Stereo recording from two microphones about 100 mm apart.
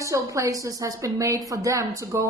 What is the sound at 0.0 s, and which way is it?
A woman's voice, 30° right (ahead or behind).